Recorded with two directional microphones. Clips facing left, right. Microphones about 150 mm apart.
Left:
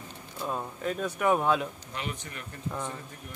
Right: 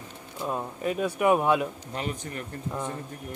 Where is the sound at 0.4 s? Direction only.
10° right (ahead or behind).